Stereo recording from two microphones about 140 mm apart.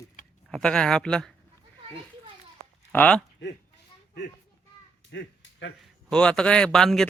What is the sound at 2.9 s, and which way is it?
Speech, 10° left (ahead or behind).